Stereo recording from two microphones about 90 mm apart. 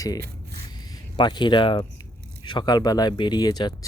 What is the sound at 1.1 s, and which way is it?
Speech, 60° left (ahead or behind).